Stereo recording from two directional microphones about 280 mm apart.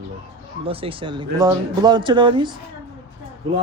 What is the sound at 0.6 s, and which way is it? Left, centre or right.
Speech, centre.